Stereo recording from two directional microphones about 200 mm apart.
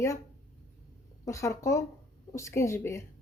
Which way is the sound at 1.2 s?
15° left (ahead or behind).